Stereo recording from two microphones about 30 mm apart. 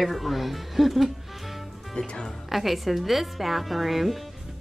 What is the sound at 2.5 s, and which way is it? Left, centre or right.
A woman's voice, centre.